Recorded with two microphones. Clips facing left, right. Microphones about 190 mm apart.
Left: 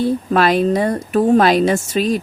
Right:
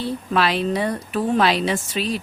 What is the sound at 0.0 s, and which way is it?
A woman's voice, 45° left (ahead or behind).